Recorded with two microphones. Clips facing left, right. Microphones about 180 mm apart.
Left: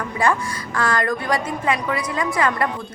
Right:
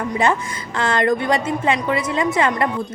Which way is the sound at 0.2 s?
20° right (ahead or behind).